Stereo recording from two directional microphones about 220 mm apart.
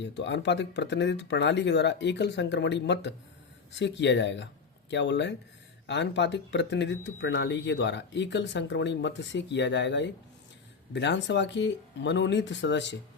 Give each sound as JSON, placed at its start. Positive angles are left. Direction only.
{"t": 0.0, "sound": "speech", "side_deg": 50}